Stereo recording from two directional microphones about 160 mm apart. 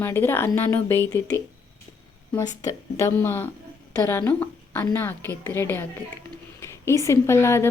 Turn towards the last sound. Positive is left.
turn(degrees=15)  # may be behind; listen again after turning